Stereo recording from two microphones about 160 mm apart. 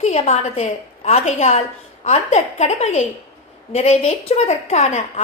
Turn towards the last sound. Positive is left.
turn(degrees=40)  # may be behind; listen again after turning